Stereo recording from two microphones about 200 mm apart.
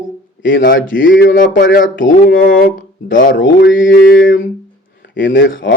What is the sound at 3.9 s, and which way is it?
Mantra, 45° left (ahead or behind).